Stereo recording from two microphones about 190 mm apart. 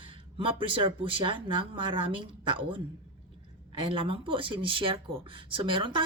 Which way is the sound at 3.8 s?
30° right (ahead or behind).